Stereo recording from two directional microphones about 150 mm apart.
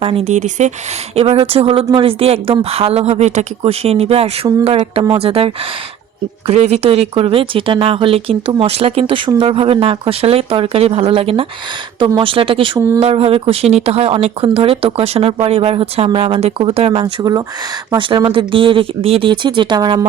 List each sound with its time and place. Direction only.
0.0 s speech: 40° right (ahead or behind)
1.1 s speech: 40° right (ahead or behind)
6.5 s speech: 45° right (ahead or behind); by 20.1 s 30° right (ahead or behind)